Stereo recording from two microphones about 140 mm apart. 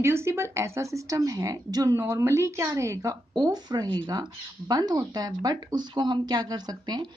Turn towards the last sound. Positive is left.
turn(degrees=-30)  # may be behind; listen again after turning